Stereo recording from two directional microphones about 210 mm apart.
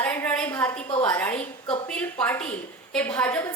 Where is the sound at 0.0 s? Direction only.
10° left (ahead or behind).